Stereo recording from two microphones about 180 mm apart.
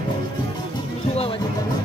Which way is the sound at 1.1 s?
35° left (ahead or behind).